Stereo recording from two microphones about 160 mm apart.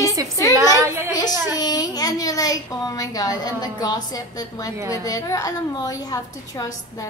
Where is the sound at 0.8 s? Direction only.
15° right (ahead or behind).